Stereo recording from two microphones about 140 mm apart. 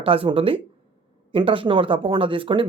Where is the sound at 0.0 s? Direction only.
40° right (ahead or behind).